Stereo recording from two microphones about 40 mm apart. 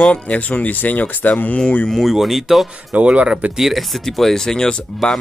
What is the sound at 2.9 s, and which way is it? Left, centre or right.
Speech, right.